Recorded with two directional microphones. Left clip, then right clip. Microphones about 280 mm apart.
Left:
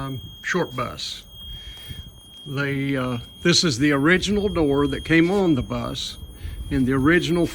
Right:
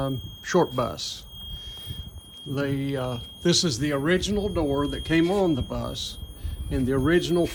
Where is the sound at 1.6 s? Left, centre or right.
Centre.